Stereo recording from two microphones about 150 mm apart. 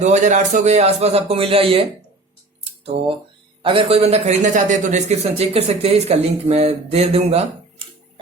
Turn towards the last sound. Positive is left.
turn(degrees=-35)  # may be behind; listen again after turning